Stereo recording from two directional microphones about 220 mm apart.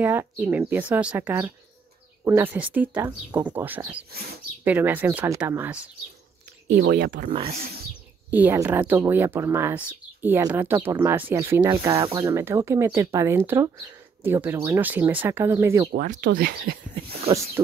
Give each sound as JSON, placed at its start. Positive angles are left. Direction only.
{"t": 0.0, "sound": "speech", "side_deg": -10}
{"t": 6.8, "sound": "speech", "side_deg": -40}
{"t": 8.3, "sound": "speech", "side_deg": -10}
{"t": 15.9, "sound": "speech", "side_deg": -40}
{"t": 16.9, "sound": "speech", "side_deg": -25}